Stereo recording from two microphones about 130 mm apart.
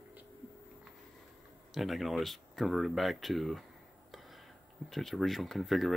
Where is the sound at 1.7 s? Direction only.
Centre (ahead or behind).